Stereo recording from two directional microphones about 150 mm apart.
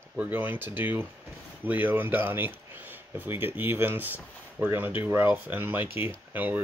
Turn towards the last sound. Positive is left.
turn(degrees=-10)  # may be behind; listen again after turning